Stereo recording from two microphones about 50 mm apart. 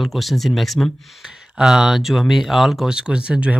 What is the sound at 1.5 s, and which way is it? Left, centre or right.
Speech, centre.